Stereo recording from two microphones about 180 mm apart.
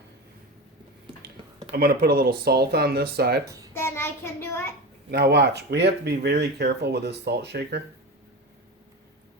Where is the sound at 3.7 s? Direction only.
15° left (ahead or behind).